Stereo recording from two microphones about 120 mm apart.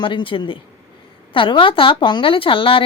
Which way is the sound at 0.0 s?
45° left (ahead or behind).